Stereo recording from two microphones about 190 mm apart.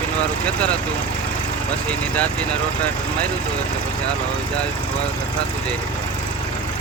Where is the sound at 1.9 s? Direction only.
5° left (ahead or behind).